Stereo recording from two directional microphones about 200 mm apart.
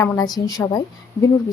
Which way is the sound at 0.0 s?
20° left (ahead or behind).